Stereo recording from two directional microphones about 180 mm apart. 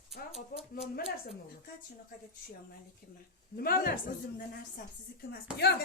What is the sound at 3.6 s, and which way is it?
A woman's voice, 60° left (ahead or behind).